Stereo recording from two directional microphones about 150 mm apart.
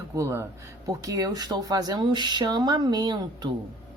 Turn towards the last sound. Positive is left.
turn(degrees=-30)  # may be behind; listen again after turning